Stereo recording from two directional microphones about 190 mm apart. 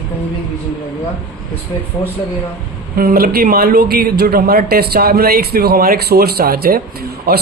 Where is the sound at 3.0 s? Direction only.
50° right (ahead or behind).